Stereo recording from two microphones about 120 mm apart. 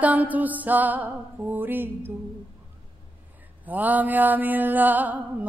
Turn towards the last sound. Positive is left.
turn(degrees=-15)  # may be behind; listen again after turning